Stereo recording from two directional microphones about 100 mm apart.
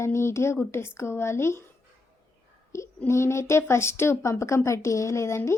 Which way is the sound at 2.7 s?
30° left (ahead or behind).